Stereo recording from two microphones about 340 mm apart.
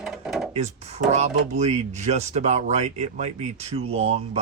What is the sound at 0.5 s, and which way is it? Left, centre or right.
Speech, centre.